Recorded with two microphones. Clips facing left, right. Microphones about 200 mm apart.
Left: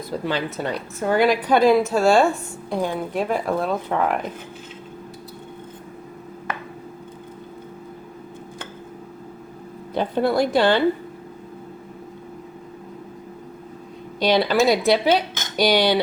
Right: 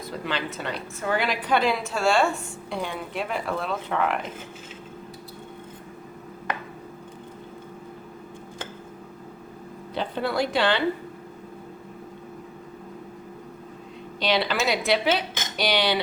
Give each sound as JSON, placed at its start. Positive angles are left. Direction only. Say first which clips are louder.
{"t": 0.3, "sound": "a woman's voice", "louder": "left 5 dB", "side_deg": 40}
{"t": 9.9, "sound": "speech", "louder": "left 7 dB", "side_deg": 45}
{"t": 14.2, "sound": "a woman's voice", "louder": "left 6 dB", "side_deg": 45}